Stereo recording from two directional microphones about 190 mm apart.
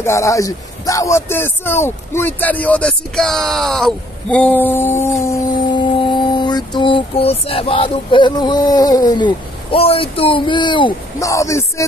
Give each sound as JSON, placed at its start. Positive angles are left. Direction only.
{"t": 0.0, "sound": "speech", "side_deg": 15}
{"t": 5.9, "sound": "a sound", "side_deg": 25}
{"t": 10.1, "sound": "speech", "side_deg": 30}